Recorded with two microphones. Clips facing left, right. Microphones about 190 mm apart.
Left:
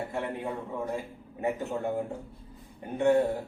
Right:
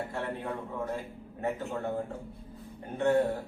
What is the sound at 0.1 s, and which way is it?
A man's voice, 10° left (ahead or behind).